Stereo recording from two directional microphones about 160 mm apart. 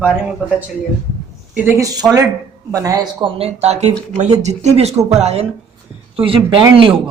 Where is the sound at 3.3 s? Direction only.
40° right (ahead or behind).